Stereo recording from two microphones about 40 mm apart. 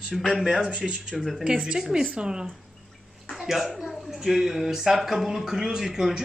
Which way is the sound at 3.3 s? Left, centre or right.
Centre.